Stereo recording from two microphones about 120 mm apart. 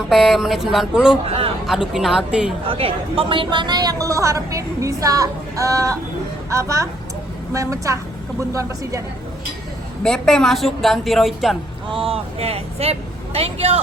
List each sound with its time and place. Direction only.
0.1 s a woman's voice: centre (ahead or behind)
2.6 s speech: 50° right (ahead or behind); by 9.0 s 25° right (ahead or behind)
10.0 s a woman's voice: 5° left (ahead or behind)
11.9 s speech: 50° right (ahead or behind)